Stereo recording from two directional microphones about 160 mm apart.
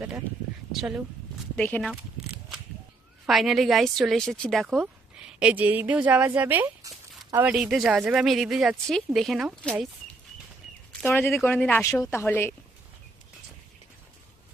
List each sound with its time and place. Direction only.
0.7 s a woman's voice: 5° right (ahead or behind)
1.5 s a woman's voice: 10° left (ahead or behind)
1.9 s a sound: 5° right (ahead or behind)
3.2 s a woman's voice: centre (ahead or behind)
11.0 s a woman's voice: 15° left (ahead or behind)